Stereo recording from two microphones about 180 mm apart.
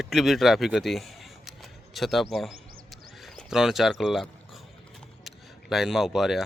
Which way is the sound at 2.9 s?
Centre (ahead or behind).